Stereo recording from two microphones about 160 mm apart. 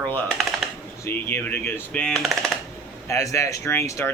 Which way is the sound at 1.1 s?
15° left (ahead or behind).